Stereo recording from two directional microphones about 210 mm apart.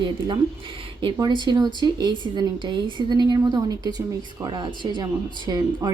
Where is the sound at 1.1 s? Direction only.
20° right (ahead or behind).